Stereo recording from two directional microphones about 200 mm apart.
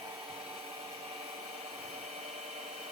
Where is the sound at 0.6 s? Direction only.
30° right (ahead or behind).